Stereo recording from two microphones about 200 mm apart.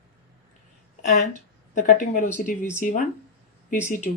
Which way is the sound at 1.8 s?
40° left (ahead or behind).